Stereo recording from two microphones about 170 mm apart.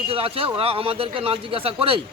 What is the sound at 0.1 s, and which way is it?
Speech, 35° right (ahead or behind).